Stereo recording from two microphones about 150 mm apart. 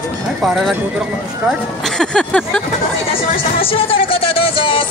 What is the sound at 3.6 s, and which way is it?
Speech, 40° left (ahead or behind).